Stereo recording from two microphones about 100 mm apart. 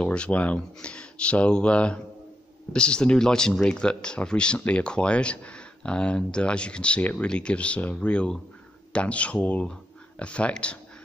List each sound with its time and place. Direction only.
0.0 s speech: 10° left (ahead or behind)